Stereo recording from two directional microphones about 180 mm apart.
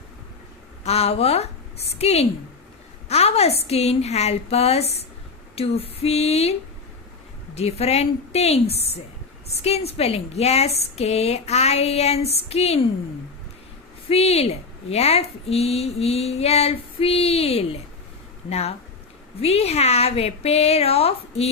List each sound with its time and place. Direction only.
0.9 s a woman's voice: 35° left (ahead or behind)
14.1 s a woman's voice: 35° left (ahead or behind)